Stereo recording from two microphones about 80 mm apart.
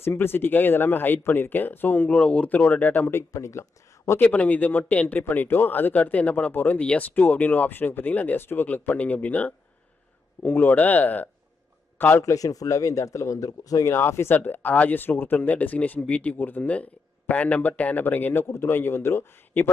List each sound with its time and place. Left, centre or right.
0.0 s speech: left
3.2 s speech: left
4.2 s a man's voice: centre
12.2 s speech: left
13.9 s speech: left